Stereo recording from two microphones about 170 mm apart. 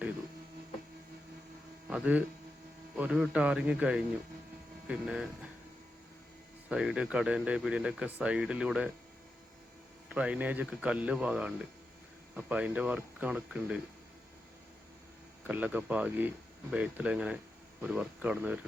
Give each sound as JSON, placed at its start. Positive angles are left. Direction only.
{"t": 1.9, "sound": "speech", "side_deg": -5}
{"t": 6.7, "sound": "speech", "side_deg": -5}
{"t": 10.2, "sound": "speech", "side_deg": -5}
{"t": 15.4, "sound": "speech", "side_deg": -10}